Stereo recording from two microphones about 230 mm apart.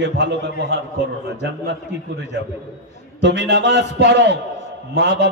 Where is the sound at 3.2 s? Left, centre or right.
Right.